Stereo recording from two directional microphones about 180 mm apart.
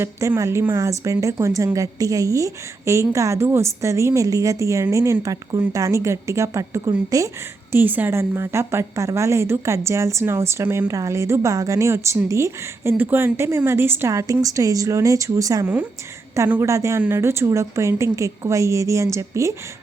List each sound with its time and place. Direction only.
0.0 s a woman's voice: 15° right (ahead or behind)